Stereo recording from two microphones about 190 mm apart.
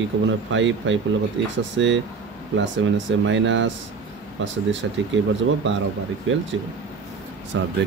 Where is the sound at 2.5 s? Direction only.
75° right (ahead or behind).